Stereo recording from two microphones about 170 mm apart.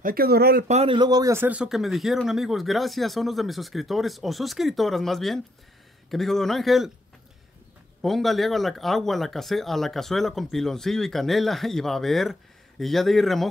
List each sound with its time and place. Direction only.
0.0 s speech: 60° right (ahead or behind)
0.7 s speech: 35° right (ahead or behind); by 6.9 s centre (ahead or behind)
8.0 s speech: centre (ahead or behind)